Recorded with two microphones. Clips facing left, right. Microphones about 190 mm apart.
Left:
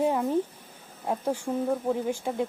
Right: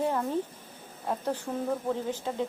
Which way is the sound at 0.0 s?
15° left (ahead or behind).